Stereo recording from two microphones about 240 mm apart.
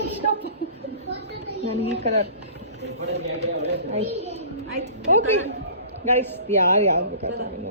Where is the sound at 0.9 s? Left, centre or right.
Right.